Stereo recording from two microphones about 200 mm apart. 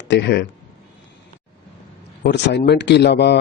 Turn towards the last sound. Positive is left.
turn(degrees=55)  # may be behind; listen again after turning